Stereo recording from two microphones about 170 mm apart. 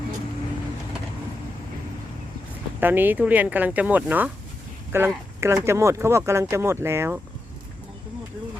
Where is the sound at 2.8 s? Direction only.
10° right (ahead or behind).